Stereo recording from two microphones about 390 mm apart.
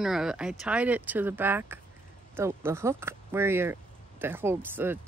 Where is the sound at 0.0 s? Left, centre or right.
Centre.